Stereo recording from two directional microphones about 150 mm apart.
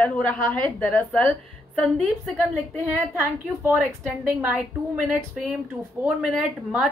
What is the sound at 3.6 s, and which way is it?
A woman's voice, 10° right (ahead or behind).